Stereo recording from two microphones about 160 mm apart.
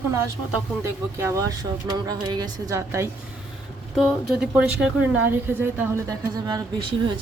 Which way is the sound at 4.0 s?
5° right (ahead or behind).